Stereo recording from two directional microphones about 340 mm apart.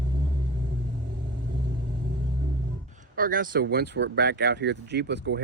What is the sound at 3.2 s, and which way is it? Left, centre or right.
Speech, right.